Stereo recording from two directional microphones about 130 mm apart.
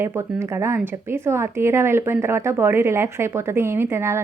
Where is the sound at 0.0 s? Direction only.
20° right (ahead or behind).